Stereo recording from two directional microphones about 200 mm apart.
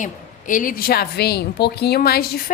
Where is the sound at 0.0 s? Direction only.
40° left (ahead or behind).